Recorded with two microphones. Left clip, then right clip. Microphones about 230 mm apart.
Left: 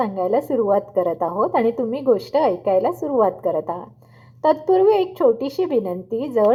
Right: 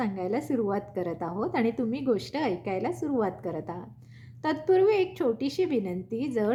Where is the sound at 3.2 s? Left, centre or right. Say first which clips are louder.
Left 12 dB; right.